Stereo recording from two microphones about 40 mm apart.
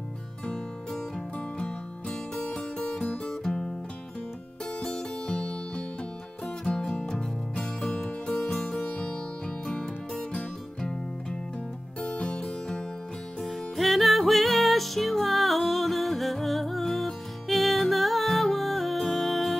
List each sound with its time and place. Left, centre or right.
1.6 s music: centre
4.8 s music: centre
8.8 s music: left
13.4 s music: centre